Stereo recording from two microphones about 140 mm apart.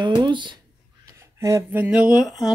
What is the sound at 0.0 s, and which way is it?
Speech, 35° right (ahead or behind).